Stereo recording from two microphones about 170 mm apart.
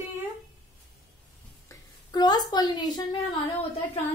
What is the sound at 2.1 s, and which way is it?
Speech, 25° left (ahead or behind).